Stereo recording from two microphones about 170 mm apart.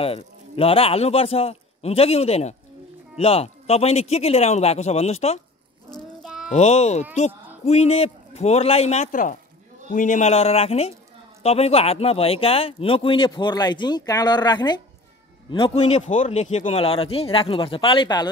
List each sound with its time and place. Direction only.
0.0 s a man's voice: 35° left (ahead or behind)
6.2 s a sound: 5° right (ahead or behind)
6.5 s a man's voice: 40° left (ahead or behind)
15.5 s a man's voice: 35° left (ahead or behind)